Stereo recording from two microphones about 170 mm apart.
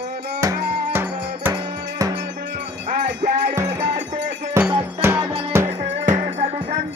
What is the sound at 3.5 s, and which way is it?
Music, 15° right (ahead or behind).